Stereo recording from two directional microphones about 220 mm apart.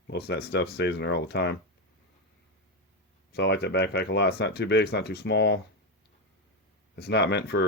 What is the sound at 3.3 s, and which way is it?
Speech, 50° left (ahead or behind).